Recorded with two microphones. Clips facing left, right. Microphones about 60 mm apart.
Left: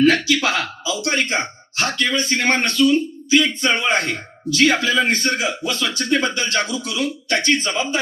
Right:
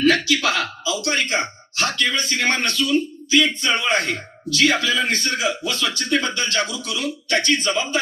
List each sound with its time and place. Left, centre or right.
0.0 s speech: left